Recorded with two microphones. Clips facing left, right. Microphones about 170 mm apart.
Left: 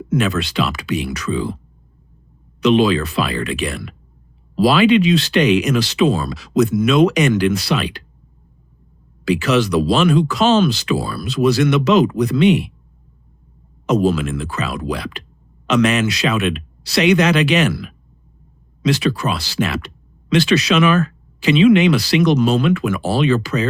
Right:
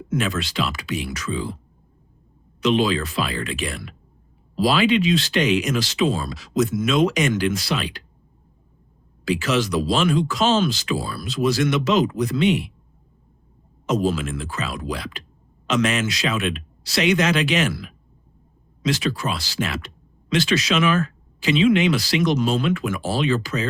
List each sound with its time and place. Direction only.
0.1 s speech: 65° left (ahead or behind)
2.6 s speech: 65° left (ahead or behind)
9.2 s speech: 65° left (ahead or behind)
13.8 s speech: 65° left (ahead or behind)